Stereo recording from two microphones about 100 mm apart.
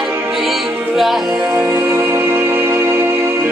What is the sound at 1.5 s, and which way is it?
Music, 30° right (ahead or behind).